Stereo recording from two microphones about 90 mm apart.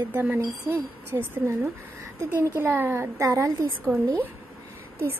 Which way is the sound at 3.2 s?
40° right (ahead or behind).